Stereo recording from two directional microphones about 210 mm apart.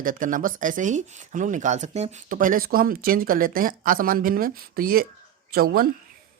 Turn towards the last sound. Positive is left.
turn(degrees=-45)  # may be behind; listen again after turning